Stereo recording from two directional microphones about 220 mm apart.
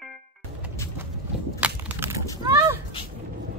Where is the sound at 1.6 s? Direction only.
10° right (ahead or behind).